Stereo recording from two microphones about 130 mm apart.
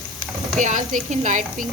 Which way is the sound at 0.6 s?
80° right.